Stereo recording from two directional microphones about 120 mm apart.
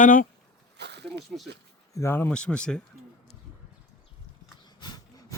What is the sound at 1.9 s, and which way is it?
Speech, 20° left (ahead or behind).